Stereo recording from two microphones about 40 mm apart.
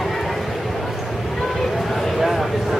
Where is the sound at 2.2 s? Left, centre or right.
Centre.